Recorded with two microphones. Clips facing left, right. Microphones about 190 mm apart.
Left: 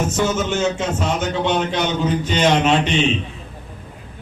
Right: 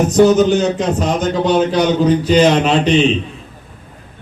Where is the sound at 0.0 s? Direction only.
35° right (ahead or behind).